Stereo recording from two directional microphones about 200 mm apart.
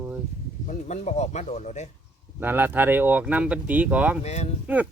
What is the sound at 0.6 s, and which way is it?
Speech, 35° left (ahead or behind).